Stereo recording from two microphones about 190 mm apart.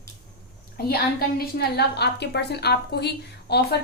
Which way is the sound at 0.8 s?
55° left (ahead or behind).